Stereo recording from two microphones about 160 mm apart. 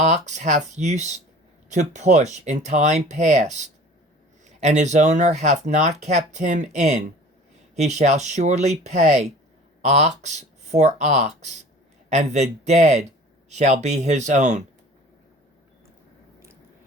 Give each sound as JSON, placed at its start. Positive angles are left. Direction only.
{"t": 0.0, "sound": "speech", "side_deg": -45}
{"t": 4.6, "sound": "speech", "side_deg": -45}